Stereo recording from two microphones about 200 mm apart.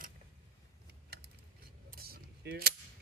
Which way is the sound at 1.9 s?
50° right (ahead or behind).